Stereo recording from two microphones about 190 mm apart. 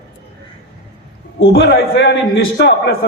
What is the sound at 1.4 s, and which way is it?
A man's voice, 55° left (ahead or behind).